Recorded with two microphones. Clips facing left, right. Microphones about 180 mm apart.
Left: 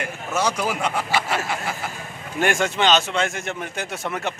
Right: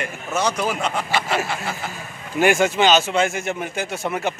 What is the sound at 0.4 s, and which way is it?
A man's voice, 10° left (ahead or behind).